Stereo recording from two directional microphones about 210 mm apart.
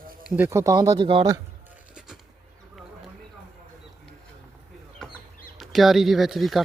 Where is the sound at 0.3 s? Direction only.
10° right (ahead or behind).